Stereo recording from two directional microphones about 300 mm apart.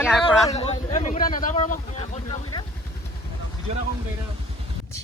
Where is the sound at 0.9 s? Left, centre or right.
Left.